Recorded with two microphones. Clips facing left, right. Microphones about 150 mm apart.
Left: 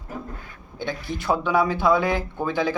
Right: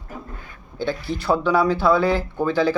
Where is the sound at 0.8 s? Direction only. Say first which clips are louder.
Right 4 dB; 20° left (ahead or behind).